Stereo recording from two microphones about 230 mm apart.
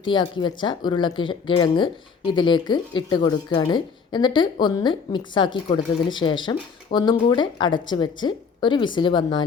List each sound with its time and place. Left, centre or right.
0.0 s speech: centre